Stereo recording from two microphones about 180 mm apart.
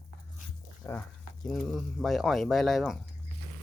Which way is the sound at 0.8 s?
15° left (ahead or behind).